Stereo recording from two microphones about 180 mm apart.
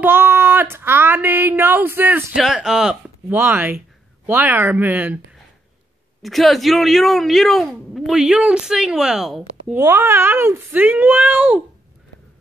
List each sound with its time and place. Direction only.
0.0 s speech: 10° right (ahead or behind)
6.2 s speech: centre (ahead or behind)
9.8 s speech: 15° right (ahead or behind)